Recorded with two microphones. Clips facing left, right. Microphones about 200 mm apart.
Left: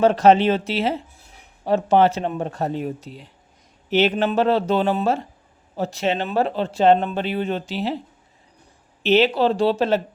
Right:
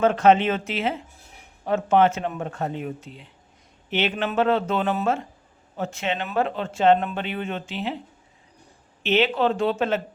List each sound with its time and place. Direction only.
0.0 s speech: 35° left (ahead or behind)
9.0 s speech: 35° left (ahead or behind)